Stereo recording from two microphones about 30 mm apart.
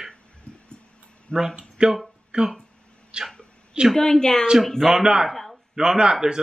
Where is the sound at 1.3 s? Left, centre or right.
Left.